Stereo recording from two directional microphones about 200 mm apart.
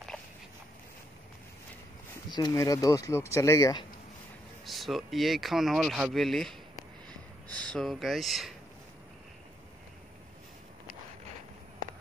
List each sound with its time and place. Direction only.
0.1 s walk: 5° left (ahead or behind)
2.3 s speech: 20° left (ahead or behind)
4.6 s speech: centre (ahead or behind)